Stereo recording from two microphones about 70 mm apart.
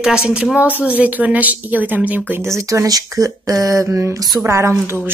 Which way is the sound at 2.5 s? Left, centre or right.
Right.